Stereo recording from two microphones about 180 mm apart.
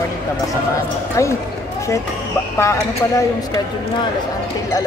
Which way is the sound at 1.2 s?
15° left (ahead or behind).